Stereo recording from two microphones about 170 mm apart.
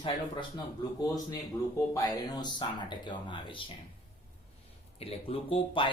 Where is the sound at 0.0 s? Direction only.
30° left (ahead or behind).